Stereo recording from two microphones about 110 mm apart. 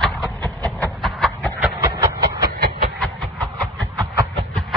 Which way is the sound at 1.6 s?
25° right (ahead or behind).